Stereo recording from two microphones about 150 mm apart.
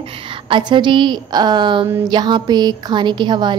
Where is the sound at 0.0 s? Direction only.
35° right (ahead or behind).